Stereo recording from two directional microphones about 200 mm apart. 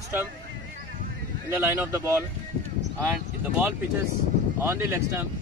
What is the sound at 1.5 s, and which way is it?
Speech, 10° right (ahead or behind).